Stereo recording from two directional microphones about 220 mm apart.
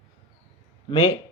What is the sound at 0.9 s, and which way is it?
Speech, 15° left (ahead or behind).